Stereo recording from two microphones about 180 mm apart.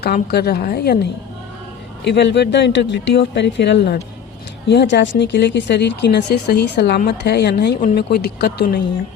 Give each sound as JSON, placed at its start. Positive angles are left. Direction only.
{"t": 0.0, "sound": "a woman's voice", "side_deg": 60}
{"t": 2.0, "sound": "a woman's voice", "side_deg": 75}